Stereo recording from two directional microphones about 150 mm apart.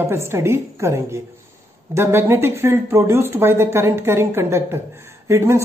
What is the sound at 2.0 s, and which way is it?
Speech, 15° right (ahead or behind).